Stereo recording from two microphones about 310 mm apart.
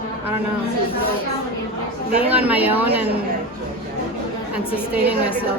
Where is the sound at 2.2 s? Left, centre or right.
Centre.